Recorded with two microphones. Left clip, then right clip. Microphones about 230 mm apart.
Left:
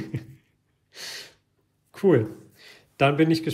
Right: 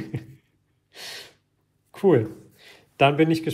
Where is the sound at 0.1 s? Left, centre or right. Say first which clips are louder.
Right 1 dB; centre.